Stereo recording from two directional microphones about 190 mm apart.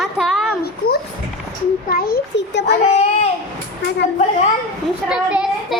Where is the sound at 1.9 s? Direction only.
50° left (ahead or behind).